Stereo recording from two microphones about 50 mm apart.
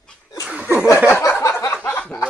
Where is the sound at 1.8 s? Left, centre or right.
Left.